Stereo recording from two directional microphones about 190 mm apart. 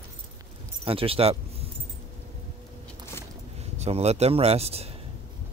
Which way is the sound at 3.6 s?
35° right (ahead or behind).